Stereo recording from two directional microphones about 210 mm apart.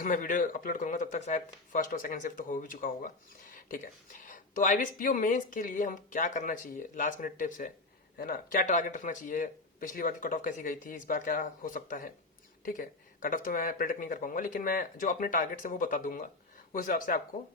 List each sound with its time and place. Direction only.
0.0 s speech: 40° left (ahead or behind)
4.3 s speech: 40° left (ahead or behind)